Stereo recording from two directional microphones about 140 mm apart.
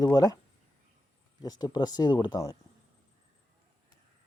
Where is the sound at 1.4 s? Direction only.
30° left (ahead or behind).